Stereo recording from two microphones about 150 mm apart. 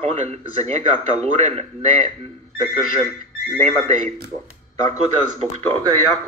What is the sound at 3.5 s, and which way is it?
Speech, 45° right (ahead or behind).